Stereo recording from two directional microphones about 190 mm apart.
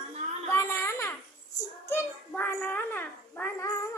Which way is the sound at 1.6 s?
15° left (ahead or behind).